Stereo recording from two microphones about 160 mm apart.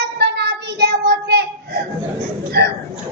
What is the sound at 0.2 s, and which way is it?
Child singing, 90° right.